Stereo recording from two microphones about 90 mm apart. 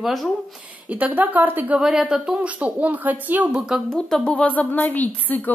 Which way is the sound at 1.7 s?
5° right (ahead or behind).